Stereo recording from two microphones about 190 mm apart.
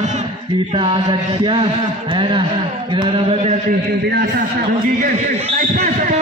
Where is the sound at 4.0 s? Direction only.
55° right (ahead or behind).